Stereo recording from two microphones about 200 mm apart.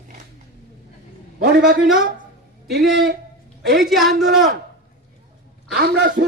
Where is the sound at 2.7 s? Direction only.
50° right (ahead or behind).